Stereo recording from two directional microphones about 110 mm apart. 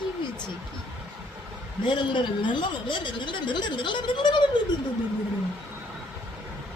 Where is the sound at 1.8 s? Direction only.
45° left (ahead or behind).